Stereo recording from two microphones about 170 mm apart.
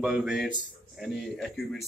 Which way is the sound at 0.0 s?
5° right (ahead or behind).